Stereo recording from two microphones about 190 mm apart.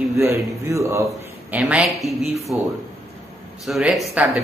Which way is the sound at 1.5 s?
5° right (ahead or behind).